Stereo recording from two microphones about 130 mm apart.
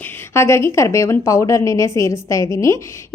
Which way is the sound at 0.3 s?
20° left (ahead or behind).